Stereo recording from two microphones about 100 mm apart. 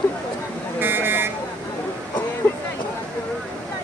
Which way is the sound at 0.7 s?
20° right (ahead or behind).